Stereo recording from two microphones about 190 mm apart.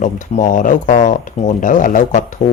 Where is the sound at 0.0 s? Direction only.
40° left (ahead or behind).